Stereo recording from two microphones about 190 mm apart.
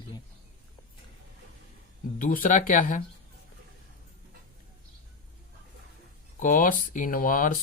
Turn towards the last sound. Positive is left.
turn(degrees=45)  # may be behind; listen again after turning